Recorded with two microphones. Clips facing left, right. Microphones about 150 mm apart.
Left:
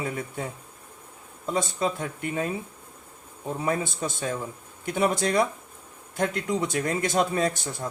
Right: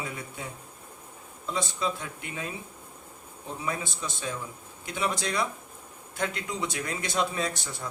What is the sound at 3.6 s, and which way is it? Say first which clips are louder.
Speech: left 6 dB; 50° left (ahead or behind).